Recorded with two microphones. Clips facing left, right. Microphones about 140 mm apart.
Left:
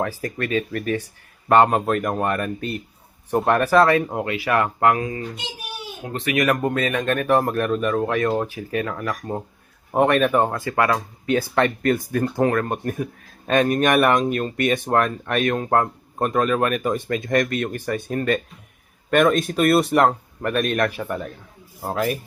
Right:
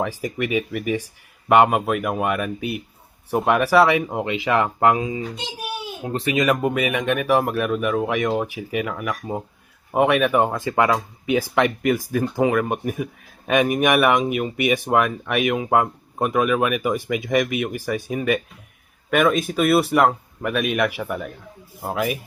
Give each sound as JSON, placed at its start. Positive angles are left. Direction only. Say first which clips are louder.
{"t": 0.0, "sound": "speech", "louder": "right 1 dB", "side_deg": -15}